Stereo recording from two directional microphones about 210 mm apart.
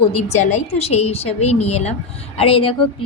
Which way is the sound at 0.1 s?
30° left (ahead or behind).